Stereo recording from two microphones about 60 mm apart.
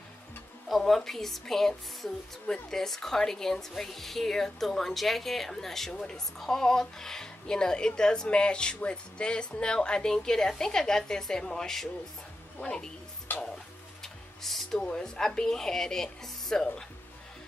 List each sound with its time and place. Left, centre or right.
0.7 s a woman's voice: centre
13.3 s stir: left
14.0 s speech: centre